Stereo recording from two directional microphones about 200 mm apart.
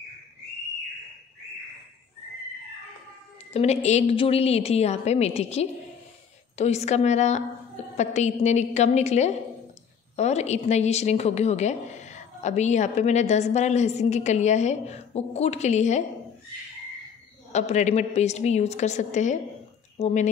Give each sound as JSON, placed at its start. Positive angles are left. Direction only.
{"t": 3.5, "sound": "a woman's voice", "side_deg": 35}
{"t": 17.5, "sound": "a woman's voice", "side_deg": 35}